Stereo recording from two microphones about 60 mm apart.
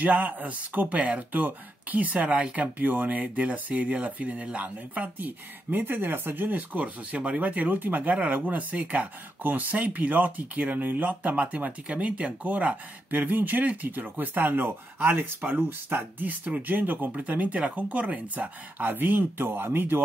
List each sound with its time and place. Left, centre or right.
0.0 s speech: right